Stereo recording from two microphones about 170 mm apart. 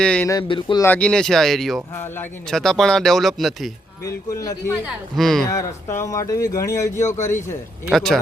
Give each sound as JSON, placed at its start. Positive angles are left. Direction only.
{"t": 0.0, "sound": "speech", "side_deg": 5}
{"t": 0.3, "sound": "speech", "side_deg": 25}
{"t": 0.8, "sound": "speech", "side_deg": 10}
{"t": 4.0, "sound": "speech", "side_deg": 20}
{"t": 5.1, "sound": "speech", "side_deg": 0}
{"t": 5.5, "sound": "speech", "side_deg": 15}
{"t": 7.9, "sound": "speech", "side_deg": 0}